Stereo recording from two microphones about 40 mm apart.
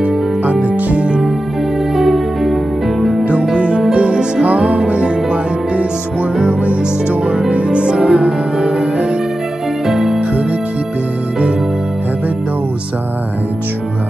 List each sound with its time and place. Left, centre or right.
0.0 s music: right
2.0 s music: centre
3.5 s music: right
9.8 s music: centre